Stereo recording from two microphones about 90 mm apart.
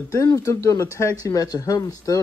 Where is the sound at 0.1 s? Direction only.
40° left (ahead or behind).